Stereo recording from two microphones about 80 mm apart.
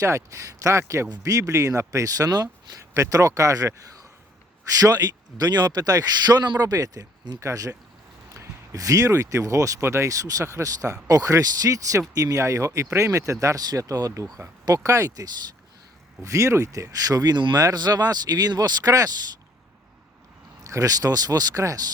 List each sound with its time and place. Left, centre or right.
0.0 s speech: right
4.8 s speech: right
20.7 s speech: right